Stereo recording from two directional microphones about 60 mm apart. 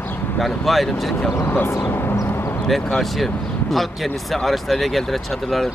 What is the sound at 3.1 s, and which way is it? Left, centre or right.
Speech, centre.